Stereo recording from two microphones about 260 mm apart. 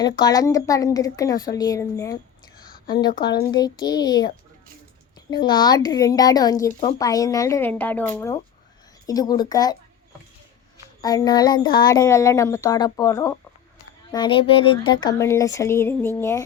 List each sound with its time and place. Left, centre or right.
0.0 s speech: centre
2.6 s a sound: left
3.5 s speech: centre
5.3 s speech: centre
11.0 s speech: centre